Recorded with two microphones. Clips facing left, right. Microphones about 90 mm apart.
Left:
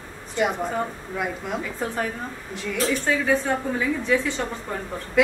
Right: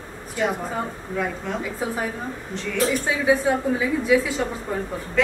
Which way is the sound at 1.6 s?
5° right (ahead or behind).